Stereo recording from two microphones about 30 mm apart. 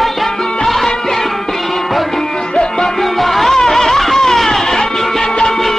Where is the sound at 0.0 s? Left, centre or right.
Centre.